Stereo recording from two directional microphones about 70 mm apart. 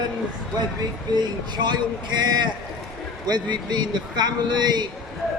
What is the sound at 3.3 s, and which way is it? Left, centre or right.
A man's voice, right.